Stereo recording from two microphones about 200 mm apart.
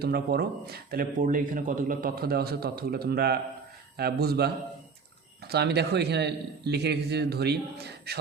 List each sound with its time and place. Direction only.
0.0 s a man's voice: 50° right (ahead or behind)